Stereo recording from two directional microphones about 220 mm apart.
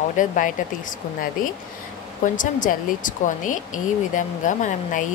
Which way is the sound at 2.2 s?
35° left (ahead or behind).